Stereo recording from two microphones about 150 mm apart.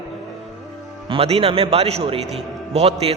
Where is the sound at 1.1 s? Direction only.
40° right (ahead or behind).